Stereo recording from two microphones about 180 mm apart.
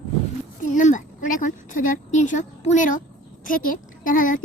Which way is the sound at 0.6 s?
45° left (ahead or behind).